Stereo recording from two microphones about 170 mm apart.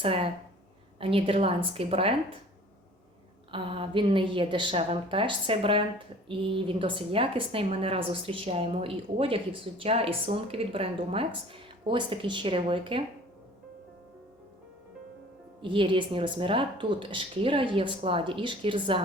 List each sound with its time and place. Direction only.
0.0 s a woman's voice: 35° right (ahead or behind)
3.5 s a woman's voice: 30° right (ahead or behind)
15.6 s speech: 30° right (ahead or behind)